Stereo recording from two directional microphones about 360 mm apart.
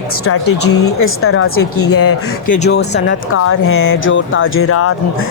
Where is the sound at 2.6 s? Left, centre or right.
Left.